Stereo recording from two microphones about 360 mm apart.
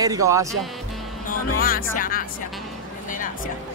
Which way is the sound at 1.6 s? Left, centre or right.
Left.